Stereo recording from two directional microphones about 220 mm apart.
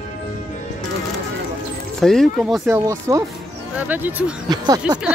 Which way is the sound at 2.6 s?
10° right (ahead or behind).